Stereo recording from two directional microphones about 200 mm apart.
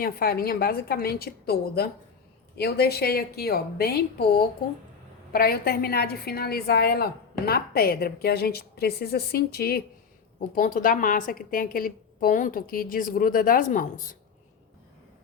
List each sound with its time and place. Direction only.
0.0 s a woman's voice: 50° left (ahead or behind)